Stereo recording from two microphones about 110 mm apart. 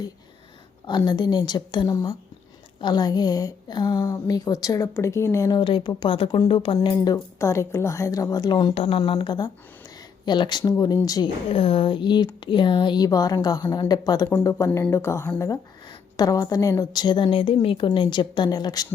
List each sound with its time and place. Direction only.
0.9 s a woman's voice: 40° left (ahead or behind)
1.9 s a woman's voice: 30° left (ahead or behind)
5.5 s speech: 50° left (ahead or behind)
6.8 s a woman's voice: 35° left (ahead or behind)
8.7 s speech: 65° left (ahead or behind)
9.0 s speech: 50° left (ahead or behind)
9.3 s speech: 40° left (ahead or behind)
11.5 s a woman's voice: 55° left (ahead or behind); by 15.3 s 25° left (ahead or behind)
15.9 s a woman's voice: 35° left (ahead or behind)